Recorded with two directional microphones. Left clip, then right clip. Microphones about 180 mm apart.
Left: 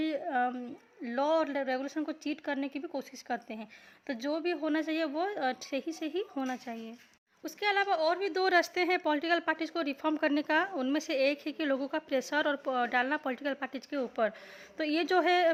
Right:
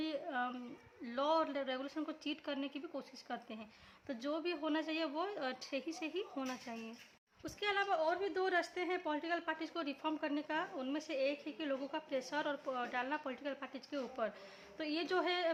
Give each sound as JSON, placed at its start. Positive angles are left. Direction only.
{"t": 0.0, "sound": "a sound", "side_deg": 30}
{"t": 1.0, "sound": "a woman's voice", "side_deg": 25}
{"t": 7.9, "sound": "speech", "side_deg": 60}